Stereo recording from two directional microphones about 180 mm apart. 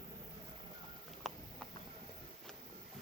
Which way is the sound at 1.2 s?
Centre (ahead or behind).